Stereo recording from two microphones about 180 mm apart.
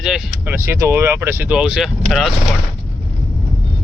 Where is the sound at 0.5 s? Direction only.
15° right (ahead or behind); by 2.3 s centre (ahead or behind).